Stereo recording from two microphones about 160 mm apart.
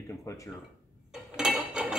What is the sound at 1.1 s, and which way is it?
Dishes, 5° right (ahead or behind).